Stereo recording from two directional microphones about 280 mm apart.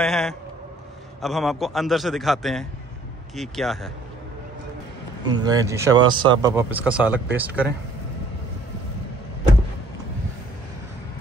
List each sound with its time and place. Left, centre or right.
0.0 s a man's voice: centre
5.2 s a man's voice: centre